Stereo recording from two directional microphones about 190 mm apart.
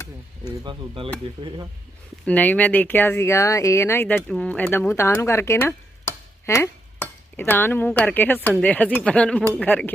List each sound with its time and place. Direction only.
0.6 s speech: 25° right (ahead or behind)
2.2 s speech: 10° left (ahead or behind)